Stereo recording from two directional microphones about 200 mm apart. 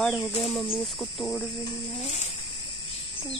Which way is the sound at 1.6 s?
35° left (ahead or behind).